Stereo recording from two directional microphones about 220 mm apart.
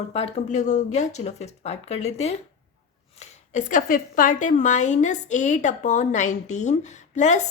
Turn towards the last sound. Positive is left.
turn(degrees=35)  # may be behind; listen again after turning